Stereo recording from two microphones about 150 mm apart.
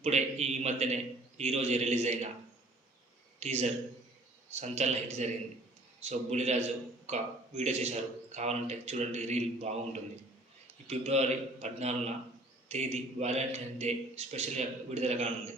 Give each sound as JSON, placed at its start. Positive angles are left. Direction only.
{"t": 0.0, "sound": "a man's voice", "side_deg": -45}
{"t": 3.4, "sound": "a man's voice", "side_deg": -45}
{"t": 10.8, "sound": "a man's voice", "side_deg": -45}